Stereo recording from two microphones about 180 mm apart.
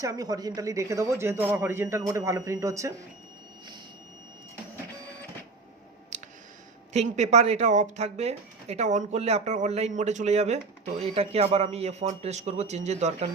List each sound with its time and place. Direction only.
0.0 s speech: 20° right (ahead or behind)
6.1 s a sound: 40° right (ahead or behind)
6.9 s speech: 40° right (ahead or behind)